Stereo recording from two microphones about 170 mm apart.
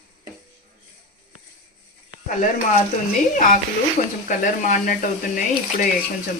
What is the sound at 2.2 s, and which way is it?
Speech, 50° left (ahead or behind).